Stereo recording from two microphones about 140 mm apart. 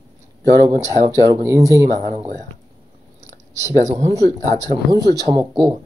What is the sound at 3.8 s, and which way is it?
Speech, 55° right (ahead or behind).